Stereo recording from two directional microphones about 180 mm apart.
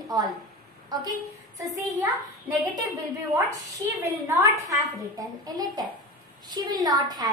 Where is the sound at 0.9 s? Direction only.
20° right (ahead or behind).